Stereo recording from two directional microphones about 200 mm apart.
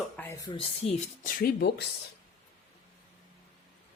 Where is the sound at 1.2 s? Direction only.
50° left (ahead or behind).